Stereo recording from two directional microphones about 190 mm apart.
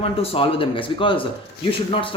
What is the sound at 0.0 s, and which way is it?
Speech, 30° left (ahead or behind).